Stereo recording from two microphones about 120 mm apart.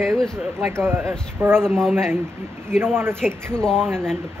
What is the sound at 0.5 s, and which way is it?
Speech, 20° right (ahead or behind).